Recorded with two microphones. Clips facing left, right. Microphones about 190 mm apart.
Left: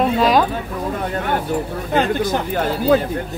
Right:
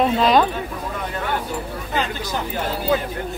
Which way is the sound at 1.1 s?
50° left (ahead or behind).